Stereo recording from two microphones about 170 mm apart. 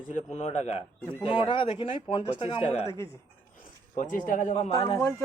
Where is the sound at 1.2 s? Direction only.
30° left (ahead or behind).